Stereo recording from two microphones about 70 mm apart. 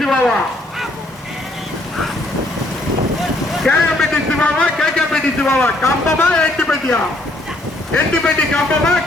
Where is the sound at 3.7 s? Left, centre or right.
Centre.